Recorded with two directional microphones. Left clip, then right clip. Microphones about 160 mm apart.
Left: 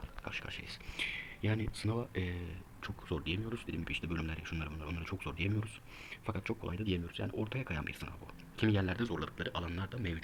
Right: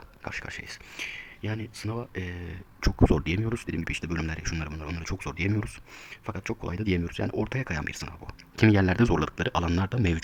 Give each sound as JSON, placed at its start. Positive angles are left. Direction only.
{"t": 0.3, "sound": "speech", "side_deg": -35}
{"t": 0.9, "sound": "speech", "side_deg": -5}
{"t": 3.1, "sound": "speech", "side_deg": -45}
{"t": 6.1, "sound": "speech", "side_deg": -10}
{"t": 6.5, "sound": "speech", "side_deg": -30}
{"t": 9.0, "sound": "speech", "side_deg": -55}